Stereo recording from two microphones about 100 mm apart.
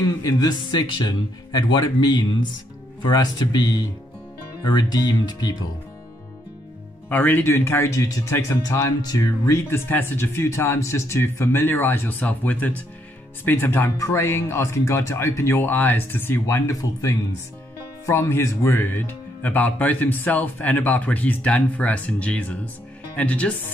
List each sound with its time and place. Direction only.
0.2 s speech: 40° left (ahead or behind)
7.1 s speech: 15° left (ahead or behind); by 9.6 s 35° left (ahead or behind)
9.7 s speech: 20° left (ahead or behind)